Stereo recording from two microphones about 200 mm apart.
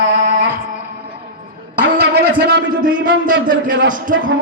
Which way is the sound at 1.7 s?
50° right (ahead or behind).